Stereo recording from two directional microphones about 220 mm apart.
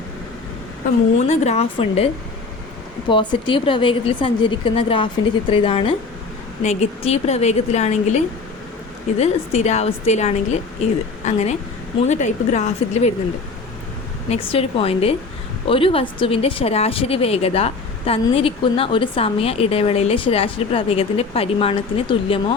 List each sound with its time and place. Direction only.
1.3 s a woman's voice: 30° left (ahead or behind)
3.1 s a woman's voice: 20° left (ahead or behind)
9.1 s a woman's voice: 30° left (ahead or behind)
14.3 s a woman's voice: 25° left (ahead or behind)